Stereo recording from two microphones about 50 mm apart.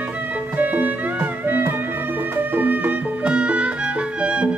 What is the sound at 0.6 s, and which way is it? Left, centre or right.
Music, right.